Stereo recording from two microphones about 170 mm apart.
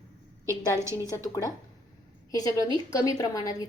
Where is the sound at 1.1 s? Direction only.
20° left (ahead or behind).